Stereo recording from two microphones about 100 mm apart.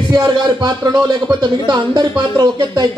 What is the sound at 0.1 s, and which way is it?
Speech, 45° right (ahead or behind).